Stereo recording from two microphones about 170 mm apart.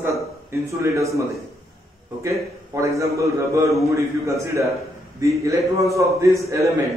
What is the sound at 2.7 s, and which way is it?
A man's voice, 20° right (ahead or behind).